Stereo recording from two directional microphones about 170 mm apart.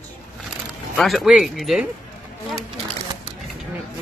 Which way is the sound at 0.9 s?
Centre (ahead or behind).